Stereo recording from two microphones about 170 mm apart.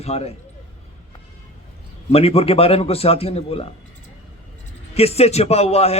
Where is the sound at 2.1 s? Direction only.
35° left (ahead or behind).